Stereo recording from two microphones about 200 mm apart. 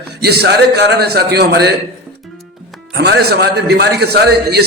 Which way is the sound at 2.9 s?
55° right (ahead or behind).